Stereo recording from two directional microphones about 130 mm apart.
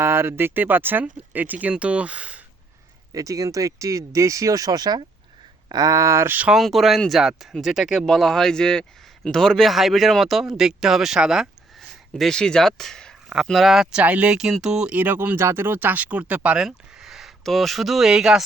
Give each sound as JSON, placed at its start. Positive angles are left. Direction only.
{"t": 0.0, "sound": "speech", "side_deg": -20}
{"t": 3.1, "sound": "speech", "side_deg": -25}
{"t": 6.5, "sound": "speech", "side_deg": 0}